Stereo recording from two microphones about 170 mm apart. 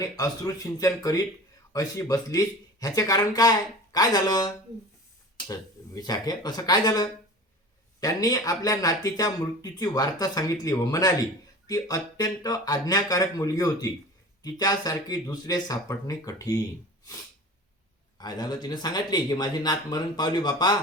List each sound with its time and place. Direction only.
0.0 s speech: 20° left (ahead or behind)
18.2 s speech: 25° left (ahead or behind)